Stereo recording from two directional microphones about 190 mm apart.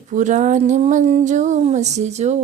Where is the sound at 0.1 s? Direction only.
40° right (ahead or behind).